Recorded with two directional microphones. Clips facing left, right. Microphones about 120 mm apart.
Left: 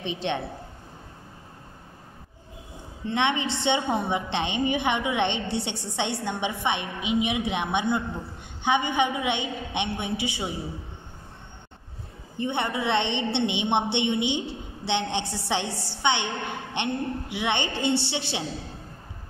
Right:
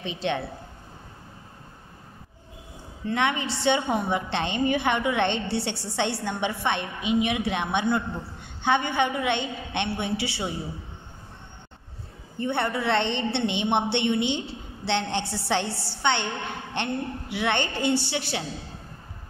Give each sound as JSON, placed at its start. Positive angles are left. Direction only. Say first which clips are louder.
{"t": 0.0, "sound": "a woman's voice", "louder": "even", "side_deg": 20}
{"t": 3.1, "sound": "a woman's voice", "louder": "even", "side_deg": 25}
{"t": 12.4, "sound": "a woman's voice", "louder": "right 1 dB", "side_deg": 20}